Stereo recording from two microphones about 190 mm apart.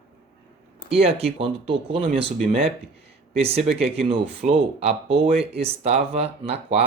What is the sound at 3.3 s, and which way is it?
Speech, 30° right (ahead or behind).